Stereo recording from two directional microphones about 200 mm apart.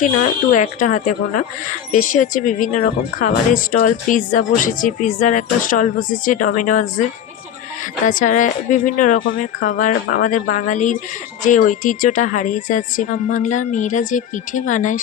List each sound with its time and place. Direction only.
0.5 s speech: 40° left (ahead or behind)
8.0 s speech: 40° left (ahead or behind)